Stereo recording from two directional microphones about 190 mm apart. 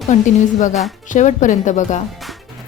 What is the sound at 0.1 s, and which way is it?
Speech, 40° left (ahead or behind).